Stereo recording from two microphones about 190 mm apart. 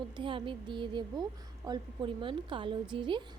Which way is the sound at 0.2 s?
25° right (ahead or behind).